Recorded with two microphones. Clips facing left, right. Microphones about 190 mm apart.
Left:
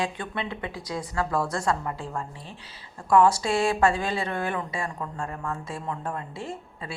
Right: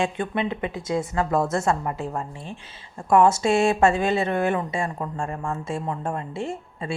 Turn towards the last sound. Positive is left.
turn(degrees=-25)  # may be behind; listen again after turning